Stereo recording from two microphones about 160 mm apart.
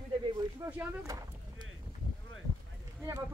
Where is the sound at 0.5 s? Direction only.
20° right (ahead or behind).